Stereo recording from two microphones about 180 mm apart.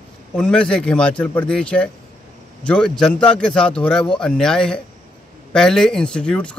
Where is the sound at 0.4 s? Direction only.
5° left (ahead or behind).